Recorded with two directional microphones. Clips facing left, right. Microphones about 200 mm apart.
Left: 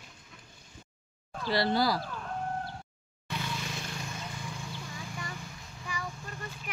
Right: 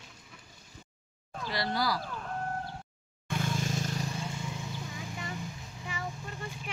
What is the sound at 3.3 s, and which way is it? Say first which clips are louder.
Vehicle: right 4 dB; 45° right (ahead or behind).